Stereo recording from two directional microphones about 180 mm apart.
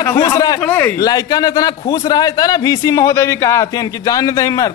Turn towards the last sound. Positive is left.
turn(degrees=20)  # may be behind; listen again after turning